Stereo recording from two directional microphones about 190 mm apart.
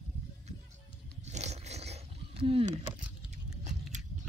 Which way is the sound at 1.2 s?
35° right (ahead or behind).